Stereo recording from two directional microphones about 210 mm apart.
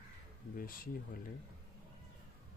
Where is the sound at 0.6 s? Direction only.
45° left (ahead or behind).